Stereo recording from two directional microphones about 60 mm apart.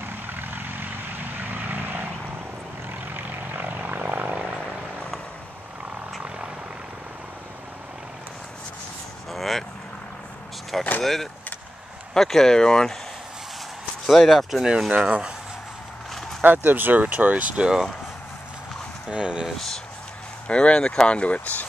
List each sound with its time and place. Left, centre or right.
0.3 s vehicle: right
9.3 s vehicle: centre
11.0 s speech: centre
14.0 s speech: centre
15.0 s speech: centre
16.2 s a sound: centre
16.4 s speech: right
19.0 s speech: centre
20.4 s speech: centre